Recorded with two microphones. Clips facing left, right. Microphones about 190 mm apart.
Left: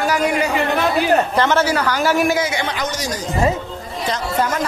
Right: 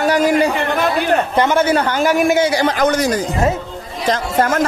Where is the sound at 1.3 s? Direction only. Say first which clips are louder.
Right 2 dB; 15° right (ahead or behind).